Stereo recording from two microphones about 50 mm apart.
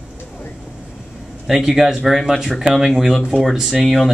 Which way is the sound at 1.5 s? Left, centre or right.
Centre.